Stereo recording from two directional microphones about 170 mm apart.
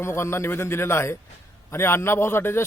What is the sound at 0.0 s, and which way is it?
A man's voice, 15° left (ahead or behind).